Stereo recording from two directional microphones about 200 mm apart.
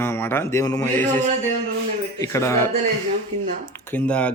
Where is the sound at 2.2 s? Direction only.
15° left (ahead or behind).